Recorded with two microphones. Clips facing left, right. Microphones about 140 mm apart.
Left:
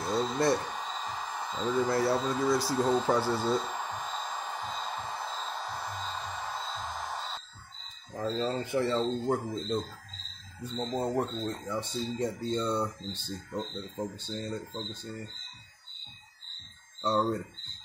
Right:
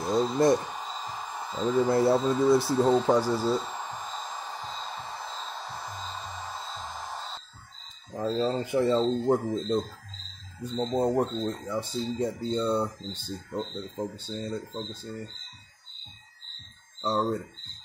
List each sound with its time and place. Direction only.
0.0 s a sound: 10° right (ahead or behind)
1.9 s speech: 25° right (ahead or behind)
3.1 s speech: 10° right (ahead or behind)
5.4 s music: centre (ahead or behind)
8.1 s speech: 15° right (ahead or behind)
10.8 s speech: 20° right (ahead or behind)
11.6 s speech: 5° right (ahead or behind)
17.0 s speech: 5° right (ahead or behind)